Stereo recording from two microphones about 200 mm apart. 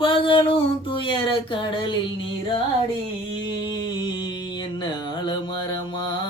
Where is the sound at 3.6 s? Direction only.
25° left (ahead or behind).